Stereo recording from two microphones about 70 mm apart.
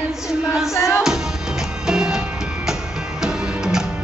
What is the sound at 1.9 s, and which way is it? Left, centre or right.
Music, centre.